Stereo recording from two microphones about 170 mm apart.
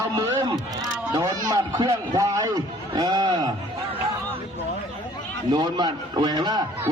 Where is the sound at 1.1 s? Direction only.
20° right (ahead or behind).